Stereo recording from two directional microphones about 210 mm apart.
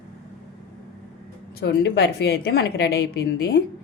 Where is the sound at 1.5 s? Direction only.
50° left (ahead or behind).